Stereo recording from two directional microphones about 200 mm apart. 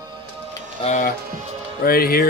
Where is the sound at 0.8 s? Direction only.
25° left (ahead or behind).